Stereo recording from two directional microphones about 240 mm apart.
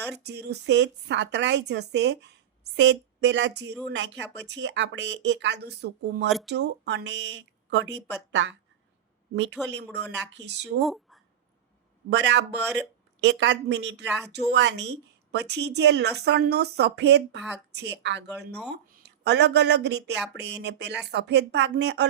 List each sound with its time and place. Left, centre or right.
0.2 s speech: right
6.2 s speech: centre
6.5 s speech: right
9.6 s speech: right
10.8 s speech: centre
12.1 s speech: right